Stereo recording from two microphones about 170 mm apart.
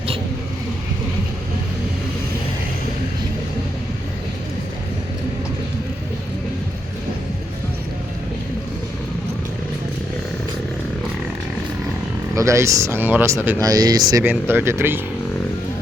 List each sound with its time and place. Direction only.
12.3 s speech: 20° right (ahead or behind)